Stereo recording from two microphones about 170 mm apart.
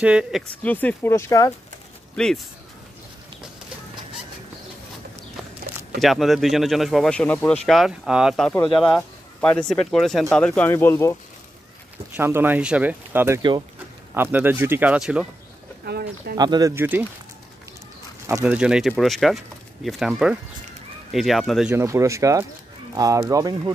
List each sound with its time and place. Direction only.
0.0 s speech: 5° right (ahead or behind)
0.7 s speech: 10° left (ahead or behind)
2.1 s speech: 5° left (ahead or behind)
5.6 s a sound: 60° right (ahead or behind)
5.9 s speech: centre (ahead or behind); by 11.1 s 15° left (ahead or behind)
12.2 s speech: 15° right (ahead or behind)
13.4 s speech: 25° right (ahead or behind)
14.1 s speech: 10° right (ahead or behind)
15.8 s speech: 70° right (ahead or behind)
16.3 s speech: 25° right (ahead or behind)
16.7 s speech: 10° right (ahead or behind)
18.4 s speech: 5° right (ahead or behind)
21.7 s speech: 15° right (ahead or behind)